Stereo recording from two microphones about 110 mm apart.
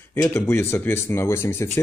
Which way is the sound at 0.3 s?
20° left (ahead or behind).